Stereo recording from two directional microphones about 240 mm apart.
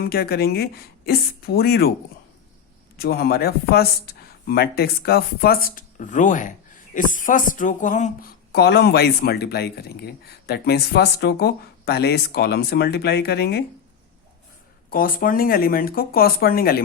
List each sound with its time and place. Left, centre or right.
0.0 s speech: left
3.0 s speech: left
8.5 s speech: left
14.8 s speech: left